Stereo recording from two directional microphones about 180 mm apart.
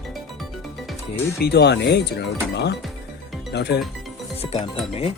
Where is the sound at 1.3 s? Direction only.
60° left (ahead or behind).